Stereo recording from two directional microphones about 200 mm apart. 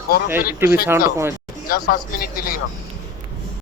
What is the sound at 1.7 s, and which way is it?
Speech, 50° left (ahead or behind).